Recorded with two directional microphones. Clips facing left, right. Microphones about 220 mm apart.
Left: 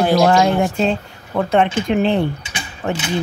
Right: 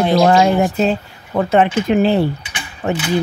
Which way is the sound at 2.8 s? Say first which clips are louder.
Right 3 dB; 15° right (ahead or behind).